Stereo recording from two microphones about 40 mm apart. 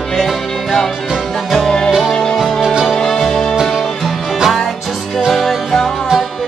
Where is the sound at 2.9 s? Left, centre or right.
Centre.